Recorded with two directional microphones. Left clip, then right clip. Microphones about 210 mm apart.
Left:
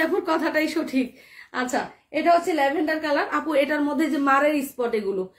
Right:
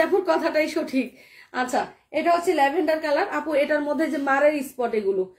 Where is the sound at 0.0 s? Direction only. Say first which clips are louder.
Right 2 dB; 20° left (ahead or behind).